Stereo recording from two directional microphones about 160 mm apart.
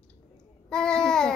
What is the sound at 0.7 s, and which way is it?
Babbling, 5° left (ahead or behind).